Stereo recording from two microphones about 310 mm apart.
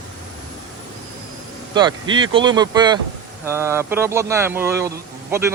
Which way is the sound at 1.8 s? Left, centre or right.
Centre.